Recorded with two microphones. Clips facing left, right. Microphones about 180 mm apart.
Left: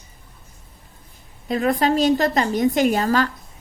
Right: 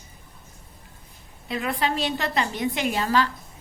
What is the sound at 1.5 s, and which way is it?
A woman's voice, 40° left (ahead or behind).